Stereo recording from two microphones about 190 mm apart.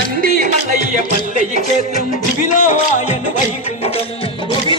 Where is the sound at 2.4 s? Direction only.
40° left (ahead or behind).